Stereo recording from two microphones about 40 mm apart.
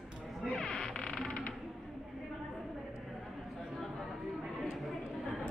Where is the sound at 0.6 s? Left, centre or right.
Centre.